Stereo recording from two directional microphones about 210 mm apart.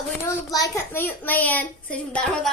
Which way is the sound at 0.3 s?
15° left (ahead or behind).